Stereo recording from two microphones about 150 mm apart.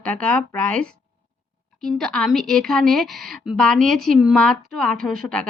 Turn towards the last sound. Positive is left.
turn(degrees=5)  # may be behind; listen again after turning